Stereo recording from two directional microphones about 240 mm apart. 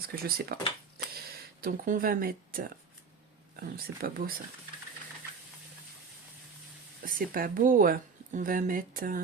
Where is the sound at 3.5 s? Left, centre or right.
Right.